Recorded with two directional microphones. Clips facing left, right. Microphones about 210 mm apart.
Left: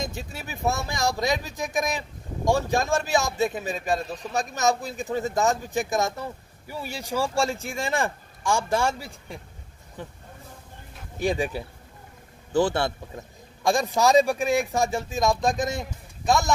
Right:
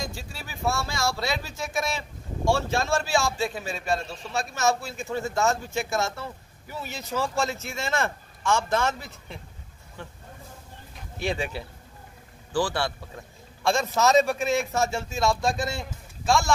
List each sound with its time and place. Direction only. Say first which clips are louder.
0.0 s speech: left 3 dB; 20° left (ahead or behind)
11.1 s speech: left 4 dB; 15° left (ahead or behind)
12.5 s speech: left 4 dB; 20° left (ahead or behind)